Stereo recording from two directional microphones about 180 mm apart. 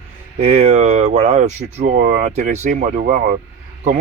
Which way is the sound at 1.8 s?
65° right (ahead or behind).